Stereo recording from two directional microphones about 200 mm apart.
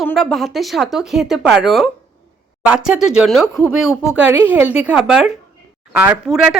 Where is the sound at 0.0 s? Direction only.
Centre (ahead or behind).